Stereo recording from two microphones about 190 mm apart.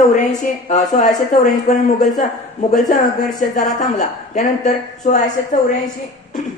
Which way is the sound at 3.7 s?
40° left (ahead or behind).